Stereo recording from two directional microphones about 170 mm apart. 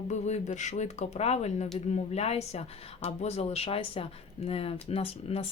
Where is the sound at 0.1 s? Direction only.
40° left (ahead or behind).